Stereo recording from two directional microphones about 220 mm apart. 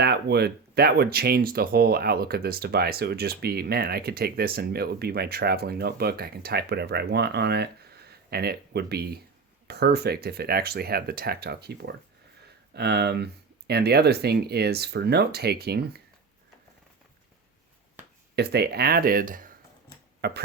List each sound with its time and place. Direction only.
0.0 s speech: 50° right (ahead or behind)
18.3 s speech: 45° right (ahead or behind)